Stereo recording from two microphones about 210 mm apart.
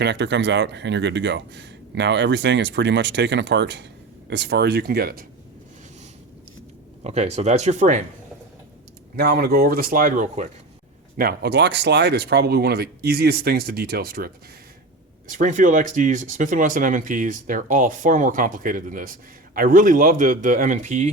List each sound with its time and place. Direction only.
0.0 s speech: 55° right (ahead or behind)
7.0 s speech: 30° right (ahead or behind)
9.1 s speech: 50° right (ahead or behind)
11.2 s speech: 50° right (ahead or behind)
15.3 s speech: 40° right (ahead or behind)